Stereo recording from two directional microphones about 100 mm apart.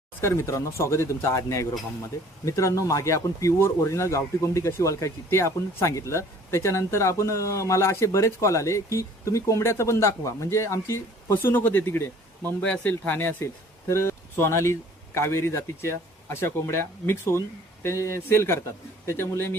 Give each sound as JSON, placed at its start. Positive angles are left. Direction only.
{"t": 0.2, "sound": "speech", "side_deg": 25}